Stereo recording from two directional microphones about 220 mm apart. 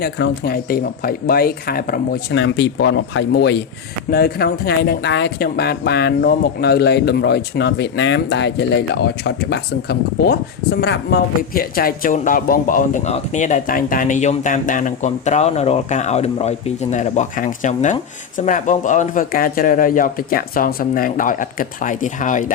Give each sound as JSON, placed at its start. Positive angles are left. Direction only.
{"t": 0.0, "sound": "speech", "side_deg": 45}
{"t": 2.3, "sound": "speech", "side_deg": 55}